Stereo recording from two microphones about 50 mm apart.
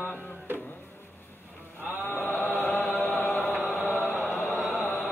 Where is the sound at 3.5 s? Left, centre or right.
Right.